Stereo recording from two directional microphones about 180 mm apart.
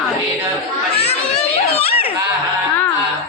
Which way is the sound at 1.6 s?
35° left (ahead or behind).